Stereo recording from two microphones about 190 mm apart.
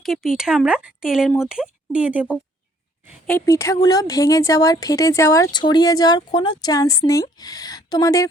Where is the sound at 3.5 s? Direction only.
15° left (ahead or behind).